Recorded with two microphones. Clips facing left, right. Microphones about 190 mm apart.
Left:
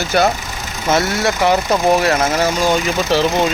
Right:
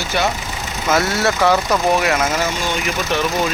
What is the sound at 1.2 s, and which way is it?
Speech, 20° left (ahead or behind).